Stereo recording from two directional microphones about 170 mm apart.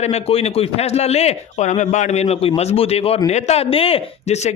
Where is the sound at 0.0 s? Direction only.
35° left (ahead or behind).